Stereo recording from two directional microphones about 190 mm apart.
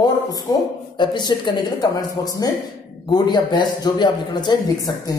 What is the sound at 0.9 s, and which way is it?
A man's voice, 25° left (ahead or behind).